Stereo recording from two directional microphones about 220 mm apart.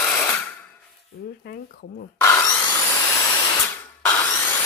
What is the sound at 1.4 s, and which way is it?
Speech, 45° left (ahead or behind).